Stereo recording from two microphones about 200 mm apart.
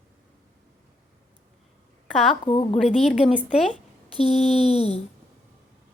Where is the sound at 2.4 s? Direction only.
25° left (ahead or behind).